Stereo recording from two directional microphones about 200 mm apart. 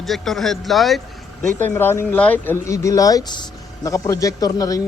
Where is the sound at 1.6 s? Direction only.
10° left (ahead or behind).